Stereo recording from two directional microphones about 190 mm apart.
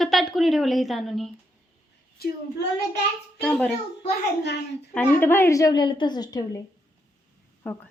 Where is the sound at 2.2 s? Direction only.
55° left (ahead or behind).